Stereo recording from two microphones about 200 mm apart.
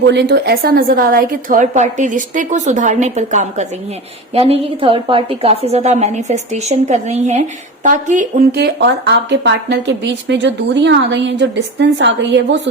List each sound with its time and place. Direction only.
0.0 s a woman's voice: 55° right (ahead or behind); by 8.4 s 40° right (ahead or behind)
8.5 s a woman's voice: 55° right (ahead or behind)